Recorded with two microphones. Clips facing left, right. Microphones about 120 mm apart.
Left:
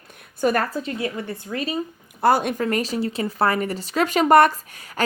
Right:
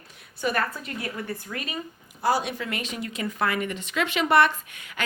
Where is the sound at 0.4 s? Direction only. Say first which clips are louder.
Left 7 dB; 45° left (ahead or behind).